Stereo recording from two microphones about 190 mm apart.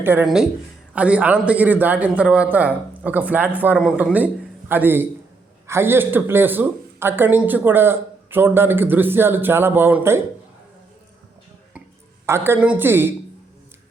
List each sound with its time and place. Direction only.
0.0 s speech: 10° right (ahead or behind)
12.2 s speech: 15° right (ahead or behind)